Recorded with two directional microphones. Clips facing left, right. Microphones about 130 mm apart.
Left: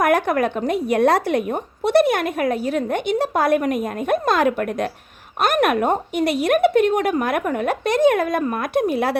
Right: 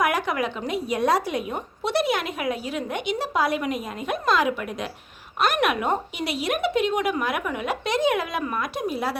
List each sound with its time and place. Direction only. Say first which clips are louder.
0.0 s a woman's voice: left 6 dB; 50° left (ahead or behind)